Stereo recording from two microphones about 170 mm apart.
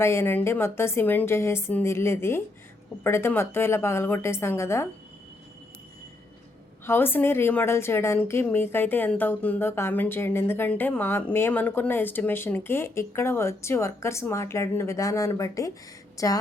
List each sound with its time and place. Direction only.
0.0 s a woman's voice: 15° left (ahead or behind)
6.8 s a woman's voice: 15° left (ahead or behind)